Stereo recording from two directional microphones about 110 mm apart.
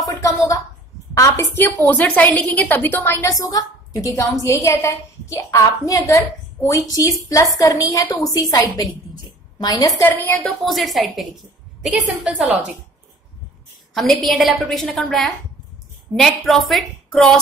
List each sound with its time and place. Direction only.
0.0 s a sound: 35° left (ahead or behind)
1.1 s a woman's voice: 30° left (ahead or behind)
10.0 s a woman's voice: 15° left (ahead or behind)
10.4 s a woman's voice: centre (ahead or behind)
13.9 s a woman's voice: centre (ahead or behind)